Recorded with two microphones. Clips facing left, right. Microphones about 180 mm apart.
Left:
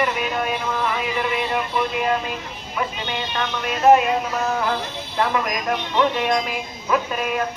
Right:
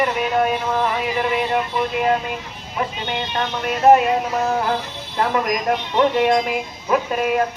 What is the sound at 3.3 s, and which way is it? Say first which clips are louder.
Speech: right 3 dB; 35° right (ahead or behind).